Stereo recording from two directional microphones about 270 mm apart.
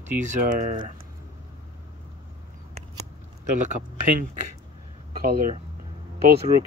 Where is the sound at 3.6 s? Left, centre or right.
Right.